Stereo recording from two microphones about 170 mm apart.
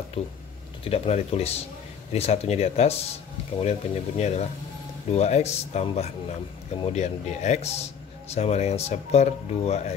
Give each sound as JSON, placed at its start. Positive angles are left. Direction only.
{"t": 0.2, "sound": "speech", "side_deg": 35}